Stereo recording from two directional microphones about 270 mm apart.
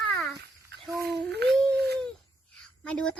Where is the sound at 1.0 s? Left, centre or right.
Right.